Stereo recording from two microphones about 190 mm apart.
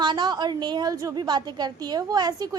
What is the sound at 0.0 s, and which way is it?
A woman's voice, 20° right (ahead or behind).